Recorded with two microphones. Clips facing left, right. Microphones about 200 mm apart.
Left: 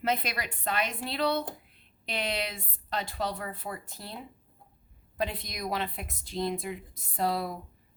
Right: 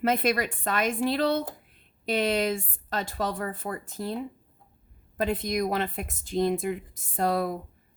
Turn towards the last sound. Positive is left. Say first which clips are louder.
# right 4 dB
turn(degrees=-50)  # may be behind; listen again after turning